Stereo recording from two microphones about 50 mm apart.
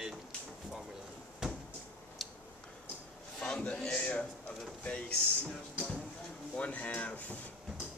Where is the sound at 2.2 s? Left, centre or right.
Centre.